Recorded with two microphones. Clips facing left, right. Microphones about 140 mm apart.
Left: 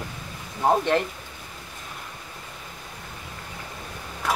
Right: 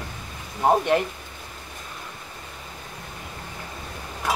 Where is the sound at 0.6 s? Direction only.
15° right (ahead or behind).